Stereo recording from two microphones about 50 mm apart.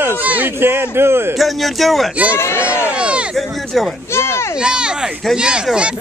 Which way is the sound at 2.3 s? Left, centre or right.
Left.